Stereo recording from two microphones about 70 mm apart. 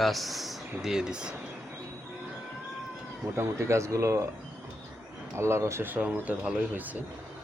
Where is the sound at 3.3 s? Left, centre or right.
Right.